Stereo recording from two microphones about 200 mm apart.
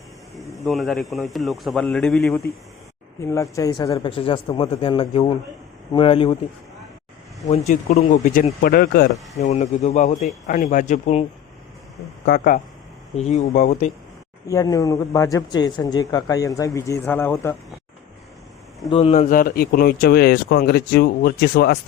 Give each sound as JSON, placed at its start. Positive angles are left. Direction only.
{"t": 0.3, "sound": "a man's voice", "side_deg": 0}
{"t": 3.2, "sound": "speech", "side_deg": 15}
{"t": 7.9, "sound": "speech", "side_deg": 30}
{"t": 8.2, "sound": "speech", "side_deg": 40}
{"t": 12.2, "sound": "speech", "side_deg": 50}
{"t": 13.1, "sound": "speech", "side_deg": 35}
{"t": 14.4, "sound": "speech", "side_deg": 15}
{"t": 18.9, "sound": "speech", "side_deg": 30}